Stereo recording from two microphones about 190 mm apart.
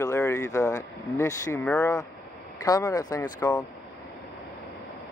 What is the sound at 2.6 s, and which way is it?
Speech, 20° left (ahead or behind).